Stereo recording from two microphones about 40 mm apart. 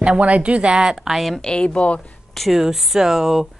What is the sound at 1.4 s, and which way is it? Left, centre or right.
Speech, left.